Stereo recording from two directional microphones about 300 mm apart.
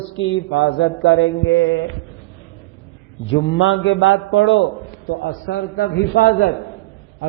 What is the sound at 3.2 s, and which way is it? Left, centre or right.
Mantra, left.